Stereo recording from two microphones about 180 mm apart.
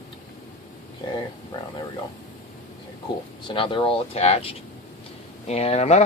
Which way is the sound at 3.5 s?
30° left (ahead or behind).